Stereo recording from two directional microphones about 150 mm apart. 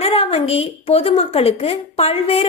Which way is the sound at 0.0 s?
40° left (ahead or behind).